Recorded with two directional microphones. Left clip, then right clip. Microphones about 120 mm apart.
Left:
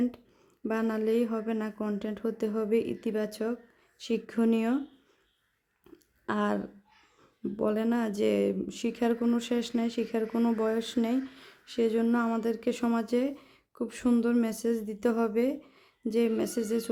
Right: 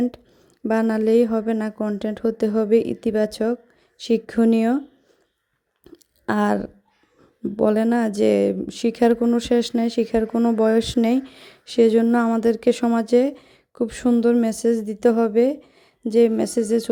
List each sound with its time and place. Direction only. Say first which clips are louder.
0.6 s speech: right 9 dB; 55° right (ahead or behind)
5.9 s chewing: right 8 dB; 30° right (ahead or behind)
6.2 s speech: right 9 dB; 60° right (ahead or behind)
10.3 s speech: right 8 dB; 40° right (ahead or behind)
10.6 s speech: right 11 dB; 60° right (ahead or behind)